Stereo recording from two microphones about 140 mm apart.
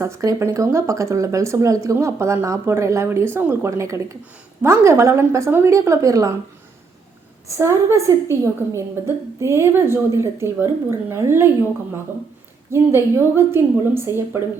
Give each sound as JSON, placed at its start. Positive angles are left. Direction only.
{"t": 0.0, "sound": "a woman's voice", "side_deg": -20}
{"t": 7.4, "sound": "a woman's voice", "side_deg": -20}
{"t": 12.7, "sound": "a woman's voice", "side_deg": -20}